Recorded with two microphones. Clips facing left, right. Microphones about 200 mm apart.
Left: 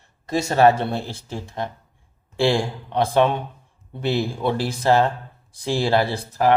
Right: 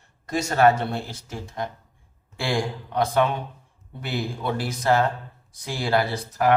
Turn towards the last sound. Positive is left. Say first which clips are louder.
# left 3 dB
turn(degrees=30)  # may be behind; listen again after turning